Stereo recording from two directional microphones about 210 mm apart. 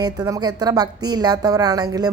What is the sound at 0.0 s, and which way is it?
A woman's voice, 20° right (ahead or behind).